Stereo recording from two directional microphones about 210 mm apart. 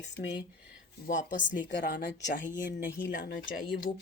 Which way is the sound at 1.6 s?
40° left (ahead or behind).